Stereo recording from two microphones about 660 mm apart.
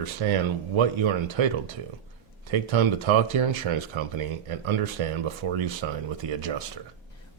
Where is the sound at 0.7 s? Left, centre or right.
Right.